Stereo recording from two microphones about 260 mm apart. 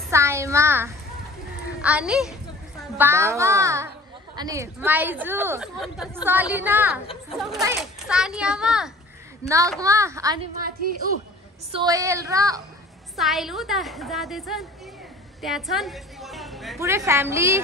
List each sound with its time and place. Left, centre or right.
0.1 s a child's voice: centre
10.6 s a woman's voice: right
11.7 s a woman's voice: centre
13.1 s a child's voice: centre
16.8 s a woman's voice: centre